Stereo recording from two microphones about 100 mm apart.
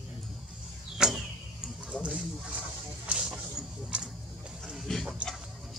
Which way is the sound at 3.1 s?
10° right (ahead or behind).